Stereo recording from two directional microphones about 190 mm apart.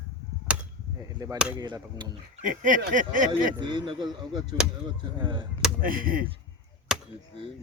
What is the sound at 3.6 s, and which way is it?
Speech, 25° right (ahead or behind).